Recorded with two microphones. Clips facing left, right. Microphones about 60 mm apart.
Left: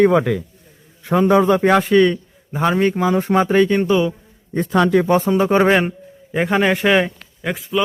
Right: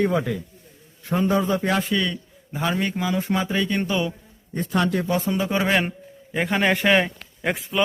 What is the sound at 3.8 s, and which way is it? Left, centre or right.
Speech, centre.